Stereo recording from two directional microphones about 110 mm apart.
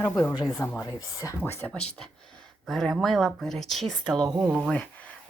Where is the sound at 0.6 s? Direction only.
15° left (ahead or behind).